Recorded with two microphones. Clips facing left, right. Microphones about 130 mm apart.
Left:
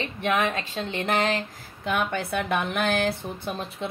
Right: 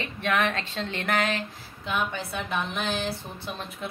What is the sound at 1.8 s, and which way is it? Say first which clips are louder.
Speech: left 3 dB; 55° left (ahead or behind).